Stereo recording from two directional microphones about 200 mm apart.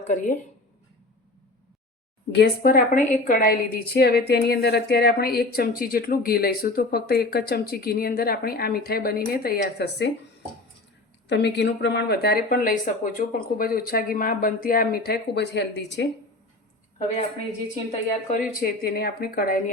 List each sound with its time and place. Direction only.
2.3 s a woman's voice: 50° left (ahead or behind)
11.3 s a woman's voice: 60° left (ahead or behind)
18.3 s a woman's voice: 50° left (ahead or behind)